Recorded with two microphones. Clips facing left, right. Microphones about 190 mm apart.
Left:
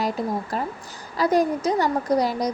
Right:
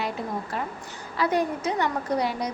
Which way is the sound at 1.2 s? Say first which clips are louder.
Left 4 dB; 40° left (ahead or behind).